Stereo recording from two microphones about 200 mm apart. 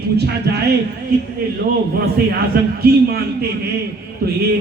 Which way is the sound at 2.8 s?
50° right (ahead or behind).